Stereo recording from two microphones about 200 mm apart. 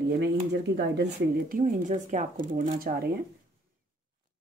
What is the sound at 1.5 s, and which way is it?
Speech, 40° right (ahead or behind).